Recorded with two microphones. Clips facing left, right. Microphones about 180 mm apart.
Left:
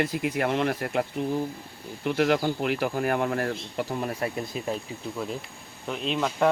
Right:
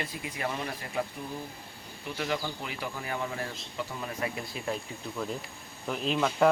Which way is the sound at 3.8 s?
40° left (ahead or behind).